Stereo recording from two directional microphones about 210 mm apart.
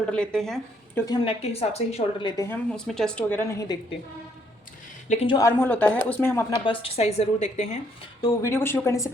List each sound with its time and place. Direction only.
0.1 s speech: 5° left (ahead or behind)
1.0 s a woman's voice: 20° left (ahead or behind)
2.7 s speech: centre (ahead or behind)
5.0 s a woman's voice: 30° left (ahead or behind)
5.5 s speech: 10° left (ahead or behind)
6.7 s a woman's voice: 25° left (ahead or behind)
8.2 s speech: 15° left (ahead or behind)